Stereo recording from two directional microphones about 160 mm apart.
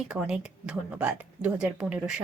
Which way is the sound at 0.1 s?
5° right (ahead or behind).